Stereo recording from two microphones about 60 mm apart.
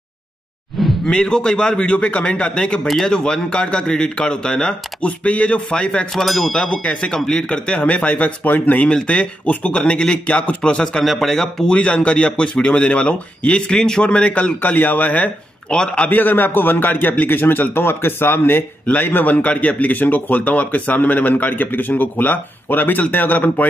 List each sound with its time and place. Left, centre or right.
0.7 s a sound: centre
1.0 s a man's voice: centre
6.1 s speech: centre
6.5 s a man's voice: centre
8.8 s a man's voice: centre
10.6 s a man's voice: centre
15.7 s a man's voice: centre
16.1 s a man's voice: left